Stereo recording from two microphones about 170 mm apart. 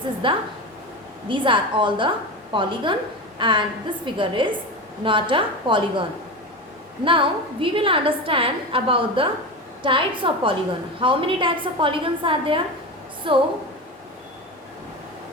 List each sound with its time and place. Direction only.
0.2 s a woman's voice: 30° right (ahead or behind)